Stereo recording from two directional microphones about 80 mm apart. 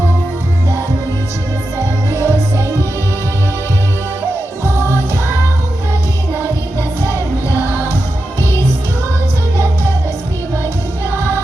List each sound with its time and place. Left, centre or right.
2.0 s music: right
4.6 s music: right
7.7 s music: right